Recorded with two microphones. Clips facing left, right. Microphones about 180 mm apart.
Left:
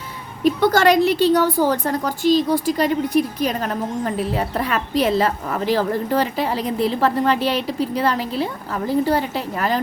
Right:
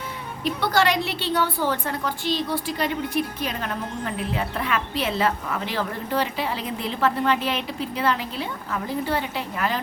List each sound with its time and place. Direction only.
0.4 s a woman's voice: 45° left (ahead or behind)